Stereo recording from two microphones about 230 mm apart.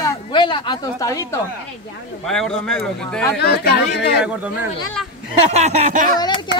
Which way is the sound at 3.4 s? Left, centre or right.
Left.